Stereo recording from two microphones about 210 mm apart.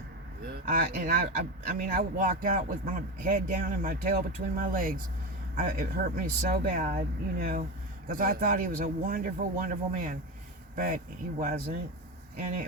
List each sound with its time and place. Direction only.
0.4 s speech: 45° right (ahead or behind)